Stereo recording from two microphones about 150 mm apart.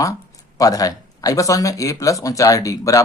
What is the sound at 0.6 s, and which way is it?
Speech, 25° left (ahead or behind).